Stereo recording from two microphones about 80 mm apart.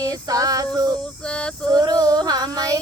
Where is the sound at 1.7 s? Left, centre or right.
Right.